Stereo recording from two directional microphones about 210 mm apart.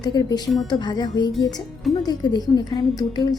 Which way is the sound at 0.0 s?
20° left (ahead or behind).